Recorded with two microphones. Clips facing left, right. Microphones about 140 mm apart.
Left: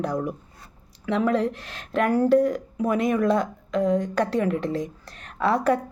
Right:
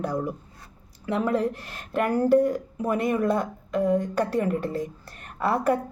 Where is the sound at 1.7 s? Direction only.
10° right (ahead or behind).